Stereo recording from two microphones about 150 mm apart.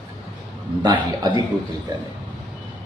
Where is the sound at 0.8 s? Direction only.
30° right (ahead or behind).